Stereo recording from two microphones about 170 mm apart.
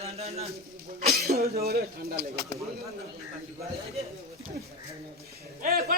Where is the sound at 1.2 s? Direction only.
65° right (ahead or behind).